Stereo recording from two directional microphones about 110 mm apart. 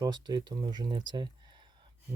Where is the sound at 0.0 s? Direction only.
40° right (ahead or behind).